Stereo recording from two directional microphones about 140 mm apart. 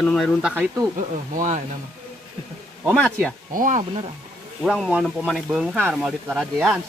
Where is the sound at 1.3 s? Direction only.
60° right (ahead or behind).